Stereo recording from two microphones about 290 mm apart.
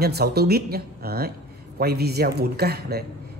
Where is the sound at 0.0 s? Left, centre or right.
Right.